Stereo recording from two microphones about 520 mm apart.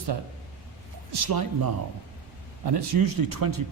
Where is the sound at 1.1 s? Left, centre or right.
Right.